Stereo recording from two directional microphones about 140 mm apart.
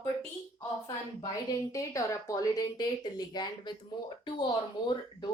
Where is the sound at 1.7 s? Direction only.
25° left (ahead or behind).